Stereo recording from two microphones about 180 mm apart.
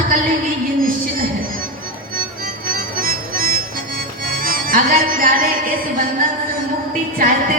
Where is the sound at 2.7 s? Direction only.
50° right (ahead or behind).